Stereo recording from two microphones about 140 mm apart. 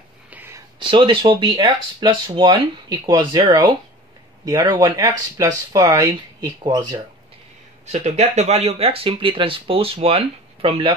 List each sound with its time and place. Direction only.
0.3 s a sound: 15° right (ahead or behind)
0.7 s speech: 40° right (ahead or behind)
7.8 s speech: 55° right (ahead or behind); by 11.0 s 35° right (ahead or behind)